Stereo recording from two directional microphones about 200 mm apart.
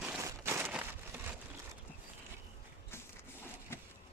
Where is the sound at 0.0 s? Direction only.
10° right (ahead or behind).